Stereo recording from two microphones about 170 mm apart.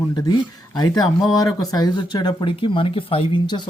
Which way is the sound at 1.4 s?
25° left (ahead or behind).